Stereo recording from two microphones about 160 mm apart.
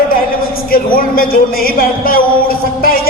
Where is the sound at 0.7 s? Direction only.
65° left (ahead or behind).